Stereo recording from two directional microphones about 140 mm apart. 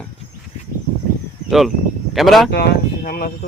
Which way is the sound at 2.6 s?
90° left.